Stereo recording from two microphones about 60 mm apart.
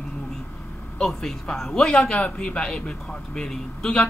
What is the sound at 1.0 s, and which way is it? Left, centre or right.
A man's voice, centre.